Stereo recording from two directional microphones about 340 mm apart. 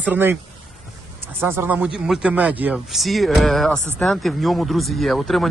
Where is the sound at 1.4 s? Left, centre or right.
Centre.